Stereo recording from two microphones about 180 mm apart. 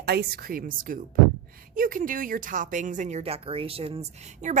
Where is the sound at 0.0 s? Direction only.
60° right (ahead or behind); by 4.3 s 35° right (ahead or behind).